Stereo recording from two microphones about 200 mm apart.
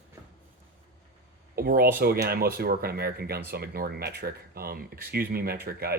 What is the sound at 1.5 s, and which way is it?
Speech, 50° right (ahead or behind).